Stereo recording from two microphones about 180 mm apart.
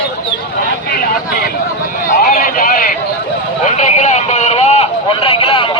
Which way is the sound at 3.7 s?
40° left (ahead or behind).